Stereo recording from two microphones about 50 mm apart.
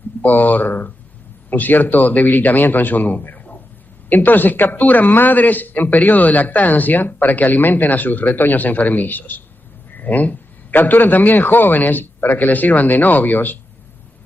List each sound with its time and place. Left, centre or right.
0.2 s speech: left